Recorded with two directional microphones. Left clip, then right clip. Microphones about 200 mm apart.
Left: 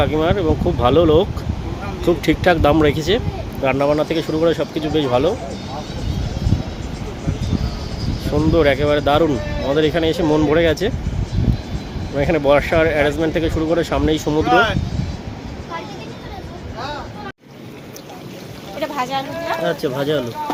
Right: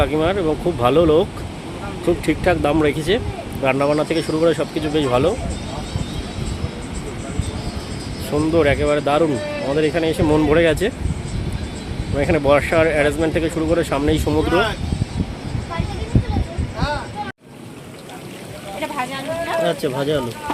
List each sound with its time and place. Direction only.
0.0 s speech: centre (ahead or behind)
8.3 s speech: 5° left (ahead or behind)
12.1 s speech: centre (ahead or behind)
18.8 s a sound: 45° left (ahead or behind)
19.6 s speech: centre (ahead or behind)